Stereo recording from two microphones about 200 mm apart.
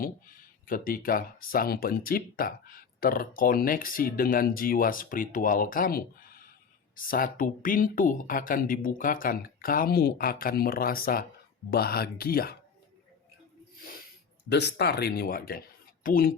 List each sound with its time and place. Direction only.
0.7 s speech: 45° left (ahead or behind)
14.5 s speech: 55° left (ahead or behind)